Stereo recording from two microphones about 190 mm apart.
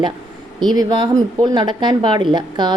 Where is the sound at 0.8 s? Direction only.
20° right (ahead or behind).